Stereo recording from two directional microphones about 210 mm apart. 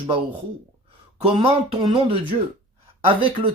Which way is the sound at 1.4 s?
25° right (ahead or behind).